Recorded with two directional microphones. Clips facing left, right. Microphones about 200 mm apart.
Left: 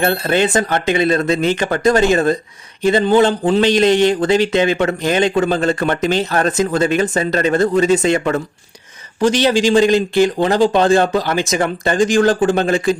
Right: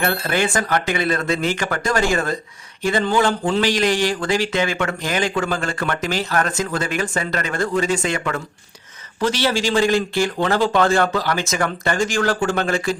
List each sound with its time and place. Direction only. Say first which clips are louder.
0.0 s a man's voice: left 5 dB; 25° left (ahead or behind)